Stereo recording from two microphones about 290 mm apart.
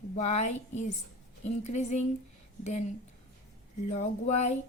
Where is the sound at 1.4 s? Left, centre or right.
Left.